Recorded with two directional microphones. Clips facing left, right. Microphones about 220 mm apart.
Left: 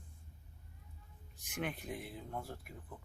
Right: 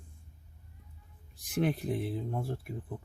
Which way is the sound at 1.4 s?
35° right (ahead or behind).